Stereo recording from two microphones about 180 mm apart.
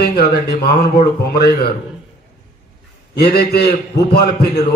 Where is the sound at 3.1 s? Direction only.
60° left (ahead or behind).